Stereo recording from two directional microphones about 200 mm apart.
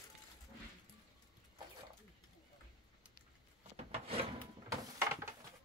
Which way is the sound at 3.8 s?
30° right (ahead or behind).